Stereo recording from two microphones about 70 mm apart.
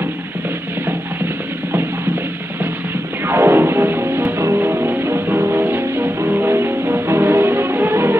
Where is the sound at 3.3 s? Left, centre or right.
Right.